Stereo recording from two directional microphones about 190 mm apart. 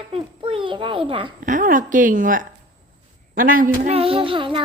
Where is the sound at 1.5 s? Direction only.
45° right (ahead or behind).